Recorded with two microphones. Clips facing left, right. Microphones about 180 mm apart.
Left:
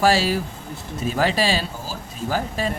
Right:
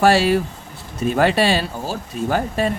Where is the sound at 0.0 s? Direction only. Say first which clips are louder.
Right 4 dB; 60° right (ahead or behind).